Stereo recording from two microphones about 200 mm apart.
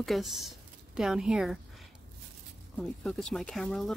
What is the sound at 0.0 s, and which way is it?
A woman's voice, centre (ahead or behind).